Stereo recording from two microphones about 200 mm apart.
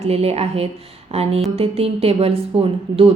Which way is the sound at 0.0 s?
30° right (ahead or behind).